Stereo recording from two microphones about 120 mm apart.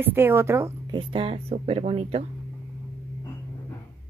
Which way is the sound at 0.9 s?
50° right (ahead or behind).